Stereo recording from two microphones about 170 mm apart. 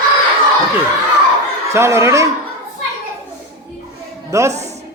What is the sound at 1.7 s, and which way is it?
Speech, 15° right (ahead or behind).